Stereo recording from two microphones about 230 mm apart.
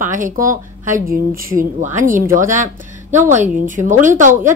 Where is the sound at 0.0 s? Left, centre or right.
Right.